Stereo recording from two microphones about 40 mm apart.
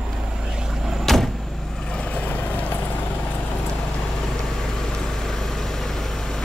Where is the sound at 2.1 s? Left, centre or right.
Left.